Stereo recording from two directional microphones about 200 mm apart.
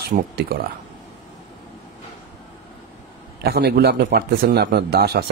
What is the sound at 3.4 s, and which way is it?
A man's voice, 50° right (ahead or behind).